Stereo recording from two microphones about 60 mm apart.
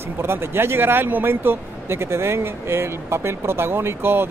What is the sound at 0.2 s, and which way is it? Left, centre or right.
Speech, right.